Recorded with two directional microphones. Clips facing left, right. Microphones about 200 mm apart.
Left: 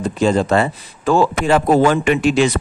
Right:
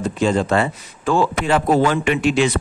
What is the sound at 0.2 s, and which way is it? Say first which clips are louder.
A man's voice: left 3 dB; 40° left (ahead or behind).